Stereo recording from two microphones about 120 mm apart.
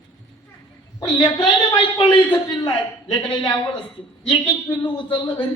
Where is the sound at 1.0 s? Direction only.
35° left (ahead or behind).